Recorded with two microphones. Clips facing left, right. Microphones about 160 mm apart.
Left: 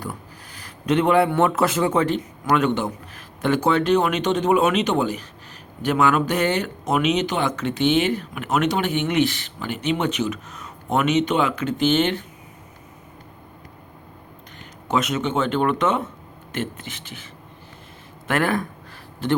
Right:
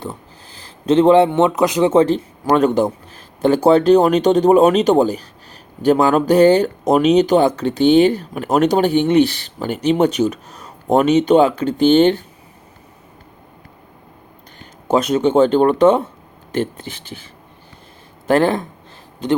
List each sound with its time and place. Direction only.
0.0 s speech: 25° right (ahead or behind)
14.6 s speech: 35° right (ahead or behind)
18.3 s speech: 30° right (ahead or behind)